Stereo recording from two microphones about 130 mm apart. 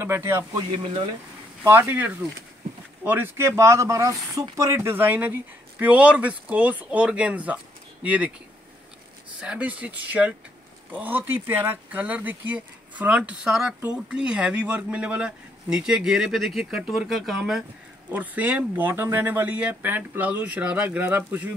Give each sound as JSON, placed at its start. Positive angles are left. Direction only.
{"t": 0.0, "sound": "speech", "side_deg": -20}
{"t": 0.6, "sound": "speech", "side_deg": -35}
{"t": 1.6, "sound": "speech", "side_deg": -15}
{"t": 9.4, "sound": "speech", "side_deg": -10}